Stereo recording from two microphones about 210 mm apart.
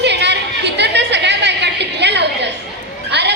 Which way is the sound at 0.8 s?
55° right (ahead or behind).